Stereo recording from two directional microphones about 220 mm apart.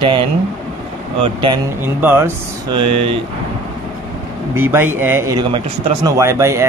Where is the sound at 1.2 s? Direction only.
25° right (ahead or behind).